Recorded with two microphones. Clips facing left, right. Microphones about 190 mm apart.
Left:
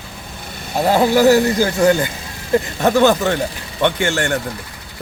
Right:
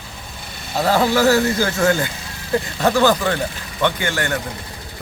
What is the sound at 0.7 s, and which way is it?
Speech, 15° left (ahead or behind).